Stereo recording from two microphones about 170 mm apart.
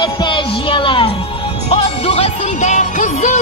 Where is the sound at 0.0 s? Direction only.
30° left (ahead or behind).